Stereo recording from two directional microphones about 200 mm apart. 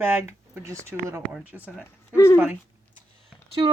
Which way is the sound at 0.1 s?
10° right (ahead or behind).